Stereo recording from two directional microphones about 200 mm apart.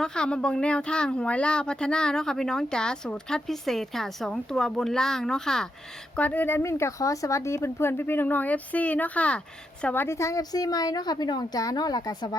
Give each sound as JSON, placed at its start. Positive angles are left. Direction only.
{"t": 0.0, "sound": "a woman's voice", "side_deg": 5}